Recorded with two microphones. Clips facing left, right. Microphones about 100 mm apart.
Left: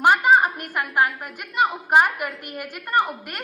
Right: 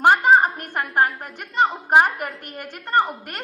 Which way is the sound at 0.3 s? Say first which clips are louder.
Right 1 dB; 35° right (ahead or behind).